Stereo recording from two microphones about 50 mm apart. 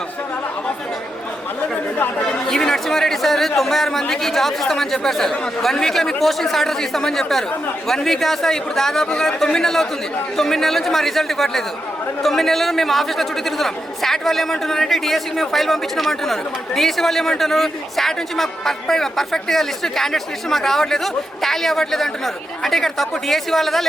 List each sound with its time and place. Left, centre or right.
2.5 s a man's voice: centre